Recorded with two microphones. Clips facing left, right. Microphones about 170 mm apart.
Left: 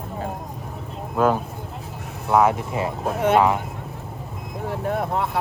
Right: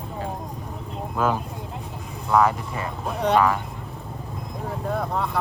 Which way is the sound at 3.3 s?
25° left (ahead or behind).